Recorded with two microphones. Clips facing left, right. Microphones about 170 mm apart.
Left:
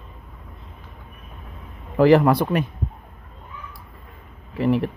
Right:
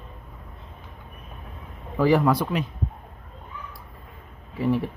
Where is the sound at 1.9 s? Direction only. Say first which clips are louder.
Left 5 dB; 75° left (ahead or behind); by 2.7 s 60° left (ahead or behind).